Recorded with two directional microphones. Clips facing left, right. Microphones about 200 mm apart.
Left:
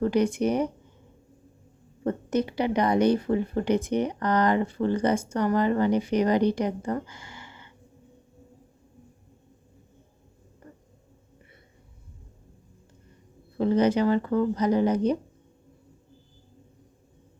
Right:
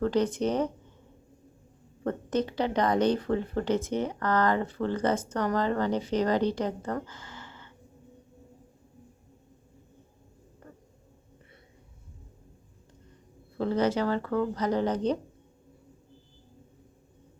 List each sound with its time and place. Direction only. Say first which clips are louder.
0.0 s a woman's voice: left 3 dB; 10° left (ahead or behind)
2.0 s a woman's voice: left 2 dB; 10° left (ahead or behind)
13.6 s a woman's voice: left 4 dB; 15° left (ahead or behind)